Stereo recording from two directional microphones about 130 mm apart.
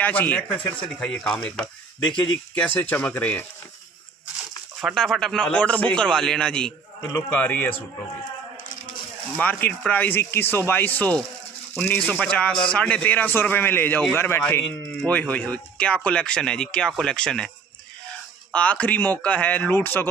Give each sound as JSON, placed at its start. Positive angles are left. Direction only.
{"t": 0.0, "sound": "speech", "side_deg": 10}
{"t": 4.8, "sound": "speech", "side_deg": 0}
{"t": 7.0, "sound": "a man's voice", "side_deg": 25}
{"t": 7.2, "sound": "speech", "side_deg": 15}
{"t": 9.4, "sound": "speech", "side_deg": 10}
{"t": 18.5, "sound": "speech", "side_deg": 10}